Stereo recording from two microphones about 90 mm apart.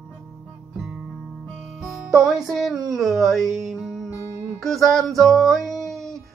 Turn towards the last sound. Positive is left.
turn(degrees=5)  # may be behind; listen again after turning